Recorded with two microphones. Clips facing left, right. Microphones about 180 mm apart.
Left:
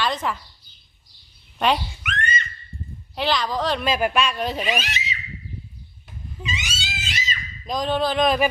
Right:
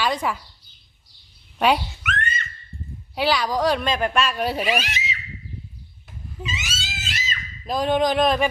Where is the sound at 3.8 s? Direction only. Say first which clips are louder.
Left 1 dB; 10° left (ahead or behind).